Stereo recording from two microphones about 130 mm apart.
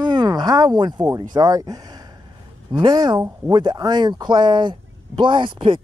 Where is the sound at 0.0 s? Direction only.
30° right (ahead or behind).